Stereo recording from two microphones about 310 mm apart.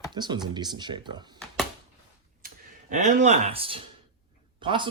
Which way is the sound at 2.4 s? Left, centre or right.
Right.